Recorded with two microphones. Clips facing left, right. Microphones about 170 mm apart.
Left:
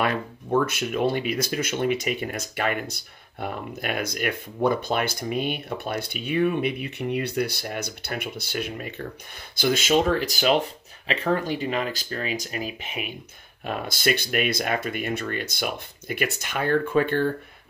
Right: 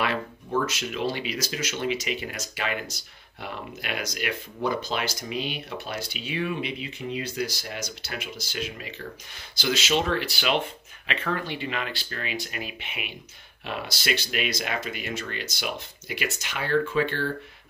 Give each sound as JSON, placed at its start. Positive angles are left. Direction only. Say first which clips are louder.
{"t": 0.0, "sound": "speech", "louder": "left 2 dB", "side_deg": 50}